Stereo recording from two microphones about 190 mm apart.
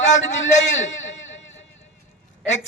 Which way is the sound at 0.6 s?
75° left (ahead or behind).